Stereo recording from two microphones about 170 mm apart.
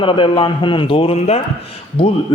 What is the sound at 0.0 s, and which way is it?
A man's voice, 30° left (ahead or behind).